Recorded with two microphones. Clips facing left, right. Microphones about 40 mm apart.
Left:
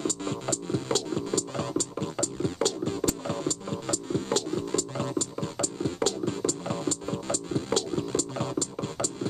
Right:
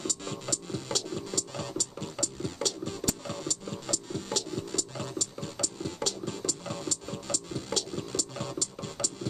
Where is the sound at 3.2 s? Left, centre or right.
Centre.